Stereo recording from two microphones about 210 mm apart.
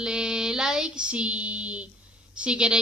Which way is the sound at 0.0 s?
5° right (ahead or behind).